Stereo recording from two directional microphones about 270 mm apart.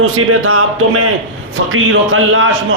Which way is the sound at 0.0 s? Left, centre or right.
Right.